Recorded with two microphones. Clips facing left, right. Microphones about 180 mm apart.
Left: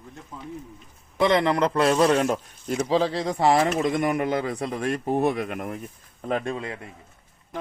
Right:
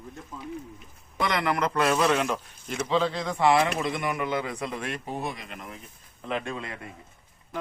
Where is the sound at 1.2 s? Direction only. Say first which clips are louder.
Left 6 dB; 25° left (ahead or behind).